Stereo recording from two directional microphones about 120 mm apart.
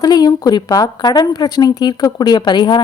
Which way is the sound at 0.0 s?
35° left (ahead or behind).